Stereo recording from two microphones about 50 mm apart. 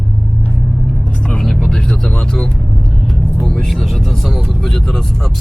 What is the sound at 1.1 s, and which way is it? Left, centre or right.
Vehicle, left.